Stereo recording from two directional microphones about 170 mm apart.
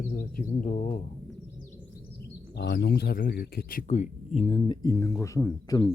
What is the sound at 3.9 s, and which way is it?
Speech, 40° left (ahead or behind).